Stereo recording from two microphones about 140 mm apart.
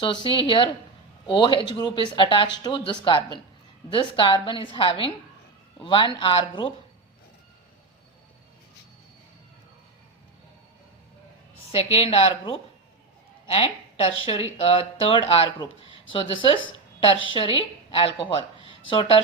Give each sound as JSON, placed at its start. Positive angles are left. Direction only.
{"t": 0.0, "sound": "speech", "side_deg": 35}
{"t": 11.7, "sound": "a woman's voice", "side_deg": 45}